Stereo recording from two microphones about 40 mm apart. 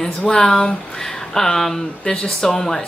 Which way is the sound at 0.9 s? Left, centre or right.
Centre.